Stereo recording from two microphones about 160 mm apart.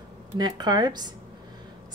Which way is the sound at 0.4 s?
25° right (ahead or behind).